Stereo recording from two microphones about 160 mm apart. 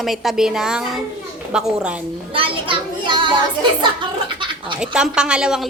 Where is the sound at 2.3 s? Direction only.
30° right (ahead or behind).